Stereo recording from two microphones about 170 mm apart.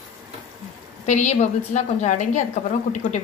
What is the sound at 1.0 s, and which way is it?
A woman's voice, 45° left (ahead or behind).